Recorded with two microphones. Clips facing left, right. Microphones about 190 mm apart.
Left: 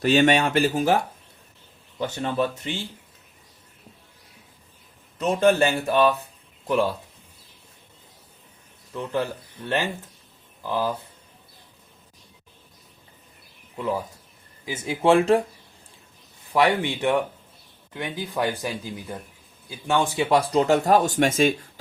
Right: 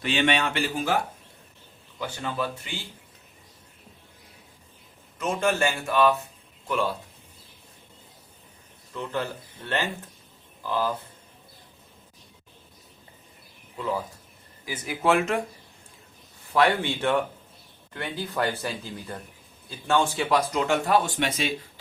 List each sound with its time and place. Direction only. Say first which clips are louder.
0.0 s speech: left 6 dB; 40° left (ahead or behind)
2.0 s speech: left 6 dB; 25° left (ahead or behind)
5.2 s speech: left 6 dB; 35° left (ahead or behind)
8.9 s speech: left 4 dB; 15° left (ahead or behind)
13.7 s speech: left 2 dB; 15° left (ahead or behind)
16.5 s speech: left 2 dB; 15° left (ahead or behind)
20.3 s speech: left 5 dB; 30° left (ahead or behind)